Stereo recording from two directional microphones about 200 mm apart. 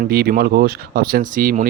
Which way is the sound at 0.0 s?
50° right (ahead or behind).